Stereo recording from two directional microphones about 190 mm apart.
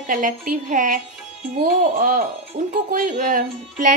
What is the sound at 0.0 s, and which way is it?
A woman's voice, 45° right (ahead or behind).